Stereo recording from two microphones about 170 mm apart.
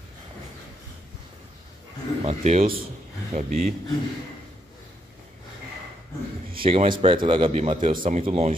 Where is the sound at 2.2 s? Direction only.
40° right (ahead or behind).